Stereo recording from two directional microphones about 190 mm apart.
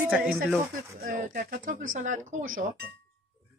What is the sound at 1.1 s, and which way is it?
Speech, 45° right (ahead or behind).